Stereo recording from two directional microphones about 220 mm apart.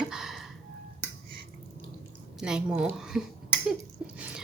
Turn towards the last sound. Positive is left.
turn(degrees=-5)  # may be behind; listen again after turning